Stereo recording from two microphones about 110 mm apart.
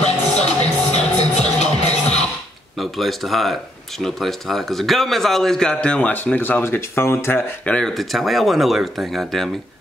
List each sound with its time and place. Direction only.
0.0 s music: 80° left
2.8 s a man's voice: centre (ahead or behind); by 7.7 s 20° left (ahead or behind)
7.7 s speech: centre (ahead or behind)